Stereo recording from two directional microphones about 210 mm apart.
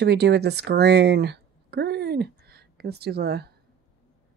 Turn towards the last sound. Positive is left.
turn(degrees=-50)  # may be behind; listen again after turning